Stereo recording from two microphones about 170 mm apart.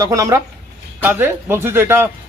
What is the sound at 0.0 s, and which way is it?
Speech, 20° right (ahead or behind).